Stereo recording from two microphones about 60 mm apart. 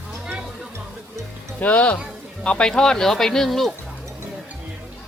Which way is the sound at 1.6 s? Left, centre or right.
Left.